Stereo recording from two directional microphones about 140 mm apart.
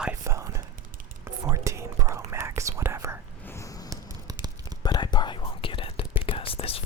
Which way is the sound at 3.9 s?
25° right (ahead or behind).